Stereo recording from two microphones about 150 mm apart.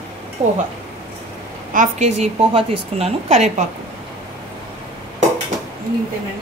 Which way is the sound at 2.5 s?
45° right (ahead or behind).